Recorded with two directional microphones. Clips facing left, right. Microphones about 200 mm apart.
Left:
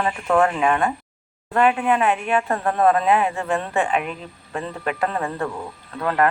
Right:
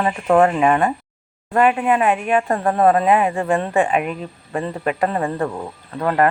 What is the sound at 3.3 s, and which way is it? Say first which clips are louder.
Speech: right 5 dB; 10° right (ahead or behind).